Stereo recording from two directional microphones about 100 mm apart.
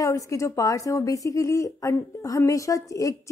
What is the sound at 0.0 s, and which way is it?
A woman's voice, 35° left (ahead or behind).